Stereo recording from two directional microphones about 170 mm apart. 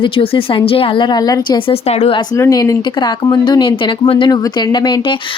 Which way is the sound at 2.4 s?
20° left (ahead or behind).